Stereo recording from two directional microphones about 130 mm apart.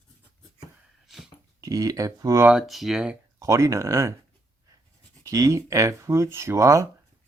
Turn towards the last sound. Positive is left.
turn(degrees=-25)  # may be behind; listen again after turning